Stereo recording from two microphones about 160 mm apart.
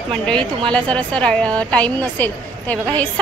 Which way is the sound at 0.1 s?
5° left (ahead or behind).